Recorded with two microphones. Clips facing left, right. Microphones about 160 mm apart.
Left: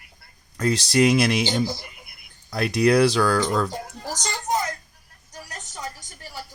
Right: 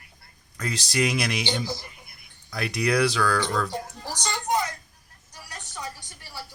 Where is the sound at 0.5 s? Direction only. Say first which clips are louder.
Left 7 dB; 30° left (ahead or behind).